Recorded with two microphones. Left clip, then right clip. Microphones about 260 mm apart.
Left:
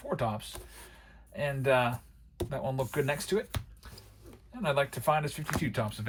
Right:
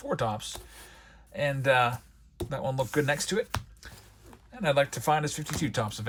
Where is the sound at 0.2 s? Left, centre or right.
Right.